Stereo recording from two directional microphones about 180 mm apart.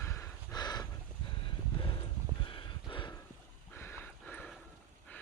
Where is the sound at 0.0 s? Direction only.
15° left (ahead or behind).